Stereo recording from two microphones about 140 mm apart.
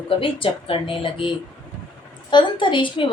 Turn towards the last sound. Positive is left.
turn(degrees=35)  # may be behind; listen again after turning